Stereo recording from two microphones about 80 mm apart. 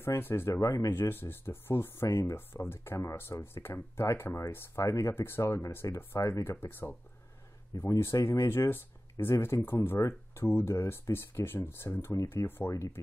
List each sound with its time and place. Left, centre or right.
0.0 s speech: left
0.6 s speech: left
0.9 s speech: left
8.0 s speech: left